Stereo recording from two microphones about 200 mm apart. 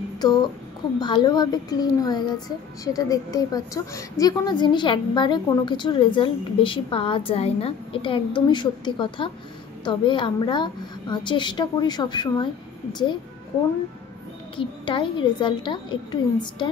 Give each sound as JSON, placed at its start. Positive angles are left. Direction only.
{"t": 0.2, "sound": "a woman's voice", "side_deg": 20}
{"t": 14.6, "sound": "a woman's voice", "side_deg": 25}